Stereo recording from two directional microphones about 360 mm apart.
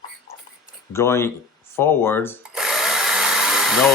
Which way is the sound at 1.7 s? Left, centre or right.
Centre.